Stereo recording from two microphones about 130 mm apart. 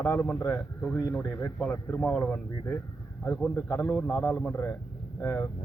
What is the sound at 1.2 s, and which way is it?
Speech, 25° left (ahead or behind).